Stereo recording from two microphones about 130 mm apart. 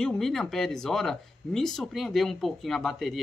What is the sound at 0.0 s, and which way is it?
Speech, 5° left (ahead or behind).